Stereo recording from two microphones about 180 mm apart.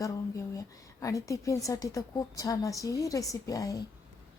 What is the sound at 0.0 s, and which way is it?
A woman's voice, 15° left (ahead or behind).